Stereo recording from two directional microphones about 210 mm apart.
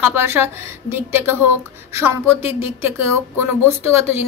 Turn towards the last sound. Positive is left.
turn(degrees=-10)  # may be behind; listen again after turning